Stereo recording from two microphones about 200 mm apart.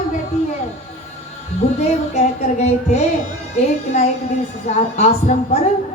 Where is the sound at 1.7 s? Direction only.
35° left (ahead or behind).